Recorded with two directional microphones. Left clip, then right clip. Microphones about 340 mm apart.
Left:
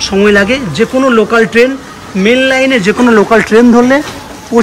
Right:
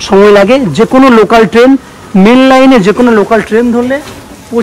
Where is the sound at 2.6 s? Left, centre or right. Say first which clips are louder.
Right 4 dB; centre.